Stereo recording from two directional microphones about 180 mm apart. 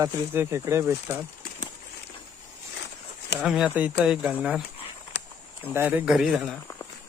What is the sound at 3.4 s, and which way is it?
Speech, 5° right (ahead or behind).